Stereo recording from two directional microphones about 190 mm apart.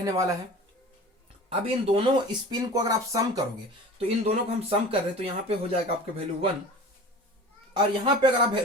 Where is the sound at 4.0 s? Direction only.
30° right (ahead or behind).